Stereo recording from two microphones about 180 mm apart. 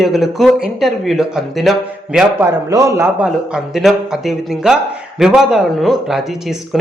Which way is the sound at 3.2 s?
5° right (ahead or behind).